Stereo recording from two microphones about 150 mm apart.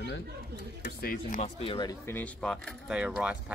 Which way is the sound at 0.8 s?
80° left.